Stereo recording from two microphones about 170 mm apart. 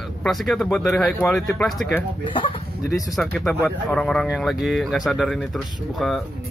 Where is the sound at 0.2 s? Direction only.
Centre (ahead or behind).